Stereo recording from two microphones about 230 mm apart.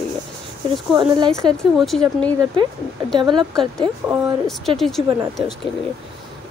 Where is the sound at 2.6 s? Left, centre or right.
Right.